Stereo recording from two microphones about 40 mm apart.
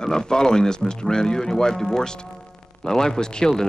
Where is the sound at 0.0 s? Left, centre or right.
Centre.